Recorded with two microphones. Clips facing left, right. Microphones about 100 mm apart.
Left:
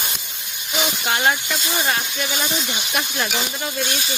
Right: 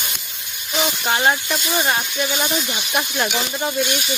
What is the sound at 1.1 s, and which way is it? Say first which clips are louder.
Speech: right 2 dB; 20° right (ahead or behind).